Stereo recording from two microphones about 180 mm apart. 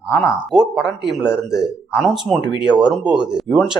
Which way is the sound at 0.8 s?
Centre (ahead or behind).